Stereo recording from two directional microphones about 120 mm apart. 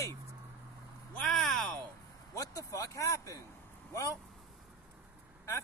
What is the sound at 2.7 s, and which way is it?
Speech, 25° left (ahead or behind).